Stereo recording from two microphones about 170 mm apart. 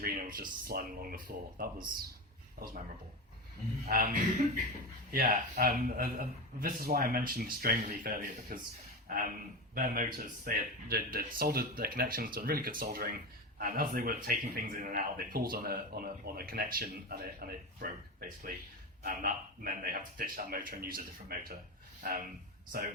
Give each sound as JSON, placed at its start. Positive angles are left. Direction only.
{"t": 0.0, "sound": "a sound", "side_deg": -60}
{"t": 0.7, "sound": "speech", "side_deg": -60}
{"t": 3.8, "sound": "speech", "side_deg": -55}